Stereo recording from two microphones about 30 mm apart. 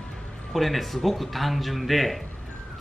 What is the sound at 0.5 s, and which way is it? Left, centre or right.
Speech, centre.